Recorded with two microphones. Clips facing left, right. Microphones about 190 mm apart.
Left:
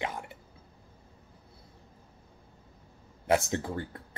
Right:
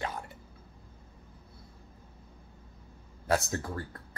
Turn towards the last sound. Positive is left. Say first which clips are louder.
# left 3 dB
turn(degrees=20)  # may be behind; listen again after turning